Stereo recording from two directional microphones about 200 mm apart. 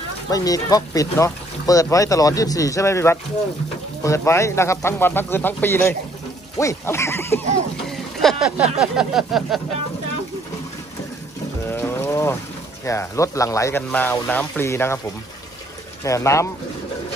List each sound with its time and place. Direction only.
0.3 s speech: 15° left (ahead or behind)
7.9 s vehicle: centre (ahead or behind)
11.7 s music: 10° left (ahead or behind)
12.8 s speech: 15° left (ahead or behind)
16.0 s speech: 15° left (ahead or behind)